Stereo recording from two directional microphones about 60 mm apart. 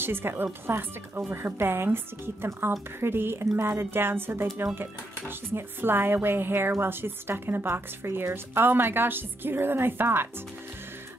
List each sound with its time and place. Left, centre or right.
0.0 s speech: right
5.5 s speech: right